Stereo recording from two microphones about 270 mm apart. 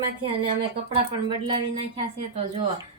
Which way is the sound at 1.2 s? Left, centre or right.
Centre.